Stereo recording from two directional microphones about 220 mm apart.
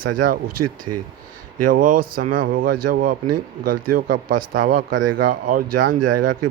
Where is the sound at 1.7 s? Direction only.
40° right (ahead or behind).